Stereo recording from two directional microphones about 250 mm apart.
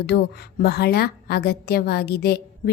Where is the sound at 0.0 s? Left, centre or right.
Left.